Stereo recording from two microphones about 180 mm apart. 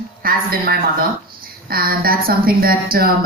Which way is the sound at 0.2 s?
55° right (ahead or behind).